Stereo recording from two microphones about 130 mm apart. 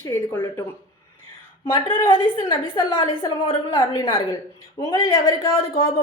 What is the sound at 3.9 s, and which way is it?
Speech, 25° left (ahead or behind).